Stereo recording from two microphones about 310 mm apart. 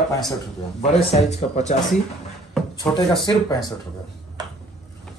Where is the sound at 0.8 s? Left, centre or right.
Centre.